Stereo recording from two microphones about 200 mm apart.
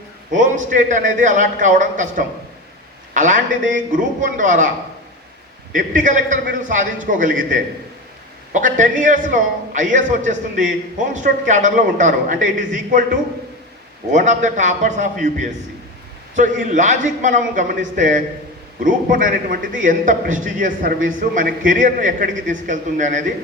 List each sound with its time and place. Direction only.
0.3 s a man's voice: 40° right (ahead or behind)
5.7 s a man's voice: 40° right (ahead or behind)
14.1 s a man's voice: 40° right (ahead or behind)